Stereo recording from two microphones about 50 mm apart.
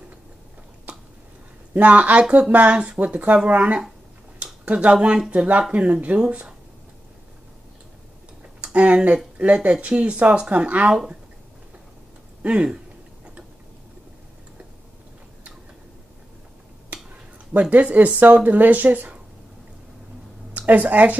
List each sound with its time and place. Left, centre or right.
0.9 s a sound: right
1.8 s speech: right
6.1 s speech: centre
8.7 s speech: right
12.4 s speech: centre
17.5 s speech: right
20.5 s a woman's voice: right